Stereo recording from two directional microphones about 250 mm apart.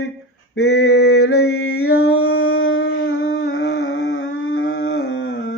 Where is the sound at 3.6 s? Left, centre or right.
Left.